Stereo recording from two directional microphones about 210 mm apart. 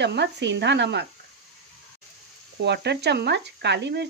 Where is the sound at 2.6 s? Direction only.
50° right (ahead or behind).